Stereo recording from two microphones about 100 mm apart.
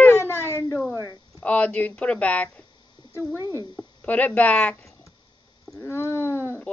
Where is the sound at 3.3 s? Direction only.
35° left (ahead or behind).